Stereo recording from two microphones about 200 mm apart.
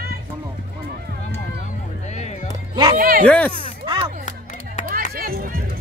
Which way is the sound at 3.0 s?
45° right (ahead or behind).